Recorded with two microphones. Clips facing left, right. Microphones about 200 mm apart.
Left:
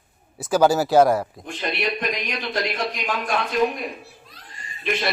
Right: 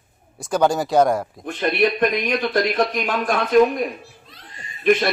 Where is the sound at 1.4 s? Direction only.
55° right (ahead or behind).